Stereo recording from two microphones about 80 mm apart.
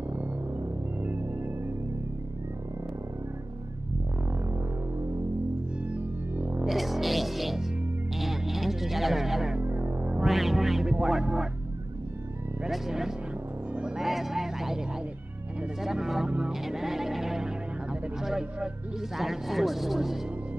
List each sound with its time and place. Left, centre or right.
1.0 s music: right
5.8 s music: centre
6.6 s music: centre
9.6 s music: right
10.2 s music: centre
12.6 s music: centre